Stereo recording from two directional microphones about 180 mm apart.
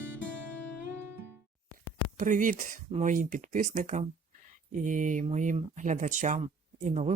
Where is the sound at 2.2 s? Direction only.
45° right (ahead or behind).